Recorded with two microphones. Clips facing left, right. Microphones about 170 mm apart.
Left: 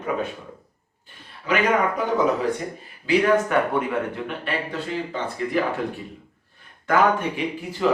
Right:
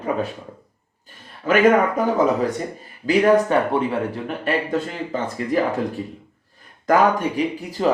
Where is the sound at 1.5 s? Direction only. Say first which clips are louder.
Right 5 dB; 50° right (ahead or behind).